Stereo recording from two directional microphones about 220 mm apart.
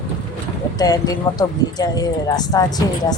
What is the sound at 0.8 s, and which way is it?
Speech, 15° left (ahead or behind).